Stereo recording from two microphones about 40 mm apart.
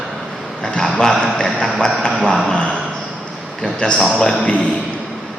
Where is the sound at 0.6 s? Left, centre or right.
Centre.